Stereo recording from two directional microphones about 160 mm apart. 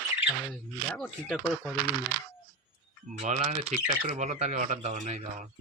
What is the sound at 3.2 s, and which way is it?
Speech, 45° right (ahead or behind).